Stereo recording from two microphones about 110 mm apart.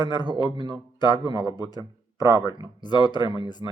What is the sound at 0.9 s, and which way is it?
A man's voice, 40° left (ahead or behind).